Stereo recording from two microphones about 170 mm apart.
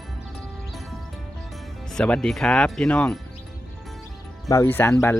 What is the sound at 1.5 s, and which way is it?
Speech, centre (ahead or behind).